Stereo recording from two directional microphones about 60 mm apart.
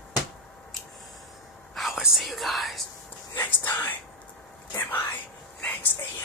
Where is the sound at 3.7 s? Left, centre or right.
Left.